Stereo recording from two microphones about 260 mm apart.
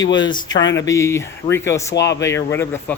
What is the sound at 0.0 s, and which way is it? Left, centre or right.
Speech, centre.